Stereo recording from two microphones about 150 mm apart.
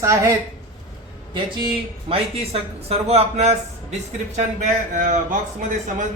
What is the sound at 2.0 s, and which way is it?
A man's voice, 40° right (ahead or behind).